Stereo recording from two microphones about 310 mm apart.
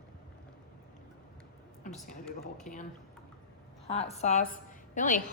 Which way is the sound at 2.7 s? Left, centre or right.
Left.